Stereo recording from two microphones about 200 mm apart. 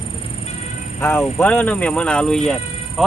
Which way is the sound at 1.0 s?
10° left (ahead or behind).